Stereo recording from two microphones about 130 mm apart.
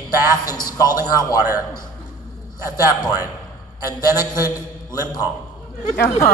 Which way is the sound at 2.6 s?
30° left (ahead or behind).